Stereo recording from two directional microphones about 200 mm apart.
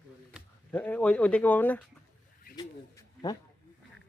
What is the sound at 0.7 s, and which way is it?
Speech, 10° left (ahead or behind).